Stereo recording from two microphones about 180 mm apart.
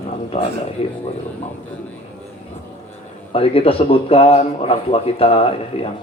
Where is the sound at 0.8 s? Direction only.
30° left (ahead or behind).